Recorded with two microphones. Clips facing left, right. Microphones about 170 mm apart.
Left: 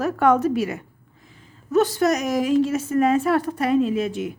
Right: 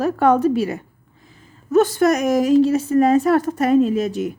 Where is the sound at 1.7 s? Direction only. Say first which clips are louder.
Right 4 dB; 50° right (ahead or behind).